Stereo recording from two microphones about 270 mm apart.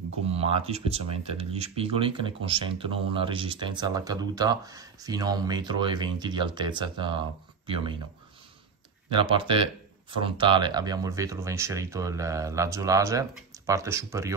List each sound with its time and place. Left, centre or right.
0.3 s speech: right
9.1 s speech: centre